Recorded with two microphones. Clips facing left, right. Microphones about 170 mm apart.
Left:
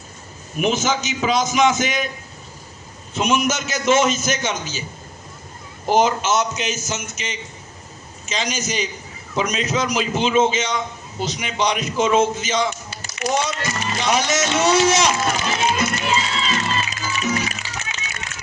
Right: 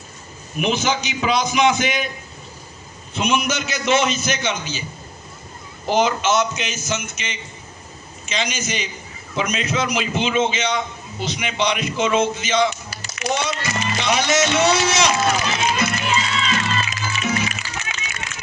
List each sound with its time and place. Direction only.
0.6 s a man's voice: 45° left (ahead or behind)
3.2 s a man's voice: 45° left (ahead or behind)
5.9 s a man's voice: 45° left (ahead or behind)
16.0 s music: 35° left (ahead or behind)